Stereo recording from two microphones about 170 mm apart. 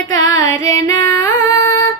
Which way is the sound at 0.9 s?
20° left (ahead or behind).